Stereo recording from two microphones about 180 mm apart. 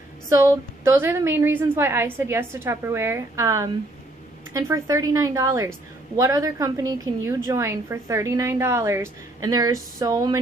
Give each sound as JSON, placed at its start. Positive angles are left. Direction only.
{"t": 0.3, "sound": "a woman's voice", "side_deg": -15}